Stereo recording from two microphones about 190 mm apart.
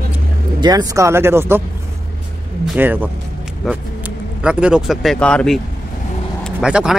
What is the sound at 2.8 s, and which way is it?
Speech, 10° right (ahead or behind).